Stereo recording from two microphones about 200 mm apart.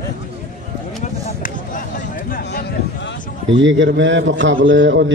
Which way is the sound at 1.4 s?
45° left (ahead or behind).